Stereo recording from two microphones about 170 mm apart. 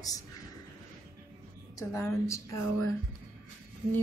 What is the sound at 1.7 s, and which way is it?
Speech, 15° left (ahead or behind).